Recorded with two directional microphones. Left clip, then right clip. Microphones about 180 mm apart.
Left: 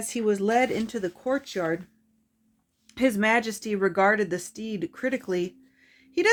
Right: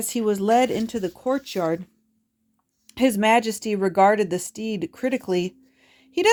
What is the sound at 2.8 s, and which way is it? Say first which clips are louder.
Speech: right 4 dB; 30° right (ahead or behind).